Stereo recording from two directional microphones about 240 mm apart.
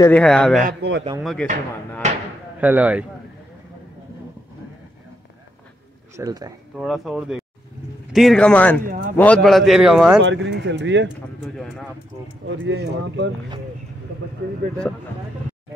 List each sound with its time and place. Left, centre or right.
0.0 s a man's voice: centre
0.7 s speech: right
1.2 s a man's voice: centre
2.0 s a sound: right
2.6 s speech: centre
6.1 s speech: centre
6.8 s a man's voice: centre
8.8 s a man's voice: right
9.1 s a man's voice: centre
10.2 s speech: right
11.4 s a man's voice: centre
12.4 s speech: right